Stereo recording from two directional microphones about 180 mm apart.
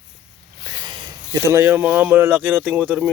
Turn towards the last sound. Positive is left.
turn(degrees=-10)  # may be behind; listen again after turning